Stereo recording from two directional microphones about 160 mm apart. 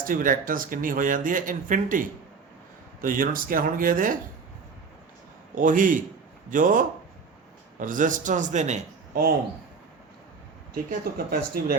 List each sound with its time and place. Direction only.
0.0 s speech: 60° right (ahead or behind)
5.5 s a man's voice: 55° right (ahead or behind)
11.3 s speech: 70° right (ahead or behind)